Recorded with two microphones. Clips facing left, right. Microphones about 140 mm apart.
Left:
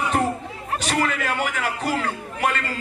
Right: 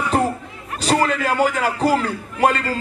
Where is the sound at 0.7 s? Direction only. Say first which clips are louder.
Right 5 dB; 35° right (ahead or behind).